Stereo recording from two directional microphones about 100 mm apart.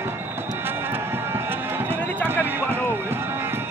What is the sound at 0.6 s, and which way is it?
Music, 25° right (ahead or behind).